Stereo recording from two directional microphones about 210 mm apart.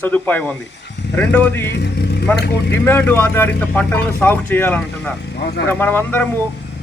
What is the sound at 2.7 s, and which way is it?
Speech, 10° left (ahead or behind).